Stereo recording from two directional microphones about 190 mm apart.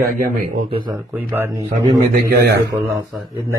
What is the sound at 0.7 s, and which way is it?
Speech, 25° right (ahead or behind).